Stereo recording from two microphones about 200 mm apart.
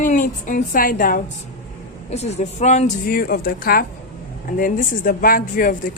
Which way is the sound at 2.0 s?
35° left (ahead or behind).